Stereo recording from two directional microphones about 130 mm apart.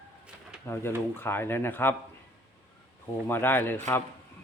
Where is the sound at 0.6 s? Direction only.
20° left (ahead or behind).